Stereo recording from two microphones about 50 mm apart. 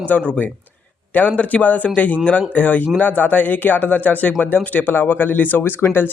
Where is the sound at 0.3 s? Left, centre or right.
Left.